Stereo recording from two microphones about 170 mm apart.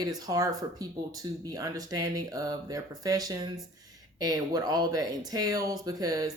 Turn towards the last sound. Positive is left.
turn(degrees=-20)  # may be behind; listen again after turning